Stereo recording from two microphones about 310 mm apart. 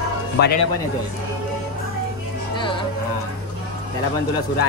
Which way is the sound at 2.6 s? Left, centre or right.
Centre.